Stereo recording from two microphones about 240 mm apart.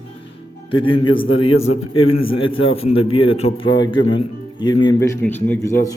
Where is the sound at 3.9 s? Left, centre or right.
Left.